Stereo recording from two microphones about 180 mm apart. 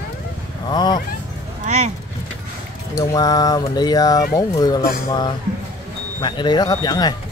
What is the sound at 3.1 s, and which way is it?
Speech, 20° left (ahead or behind).